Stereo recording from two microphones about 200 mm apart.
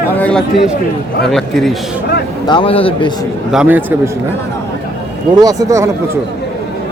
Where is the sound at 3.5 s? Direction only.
5° right (ahead or behind).